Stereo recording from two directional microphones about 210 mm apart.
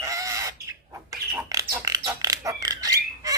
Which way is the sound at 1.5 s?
15° right (ahead or behind).